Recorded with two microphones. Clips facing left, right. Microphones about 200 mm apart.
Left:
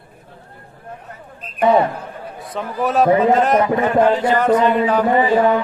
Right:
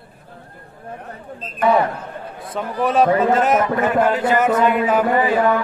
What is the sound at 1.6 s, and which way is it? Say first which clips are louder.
Speech: left 2 dB; 25° left (ahead or behind).